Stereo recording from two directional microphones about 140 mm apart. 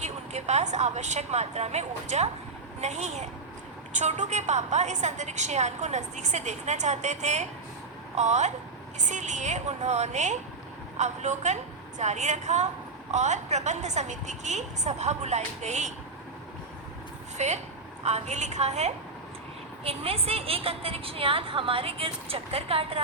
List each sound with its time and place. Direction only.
0.0 s a woman's voice: 55° right (ahead or behind)
17.3 s a woman's voice: 55° right (ahead or behind)